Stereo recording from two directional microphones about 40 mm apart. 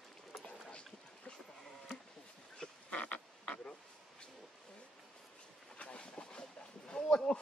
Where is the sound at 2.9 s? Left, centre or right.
Left.